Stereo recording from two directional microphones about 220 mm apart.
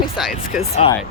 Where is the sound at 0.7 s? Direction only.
25° left (ahead or behind).